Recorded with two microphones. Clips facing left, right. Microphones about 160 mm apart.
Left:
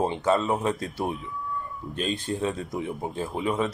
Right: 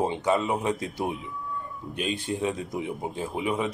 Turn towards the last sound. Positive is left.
turn(degrees=-15)  # may be behind; listen again after turning